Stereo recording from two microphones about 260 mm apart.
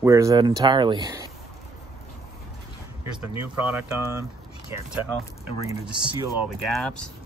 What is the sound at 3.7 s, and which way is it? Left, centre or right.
Speech, centre.